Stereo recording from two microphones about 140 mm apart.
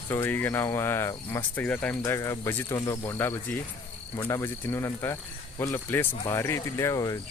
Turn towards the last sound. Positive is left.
turn(degrees=25)  # may be behind; listen again after turning